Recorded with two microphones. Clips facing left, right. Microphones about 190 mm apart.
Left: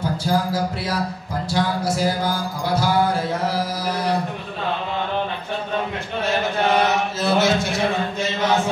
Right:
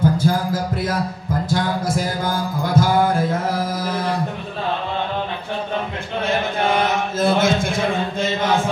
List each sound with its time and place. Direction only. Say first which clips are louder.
0.0 s a sound: right 3 dB; 50° right (ahead or behind)
1.5 s music: even; 50° right (ahead or behind)
6.8 s chant: right 1 dB; 50° right (ahead or behind)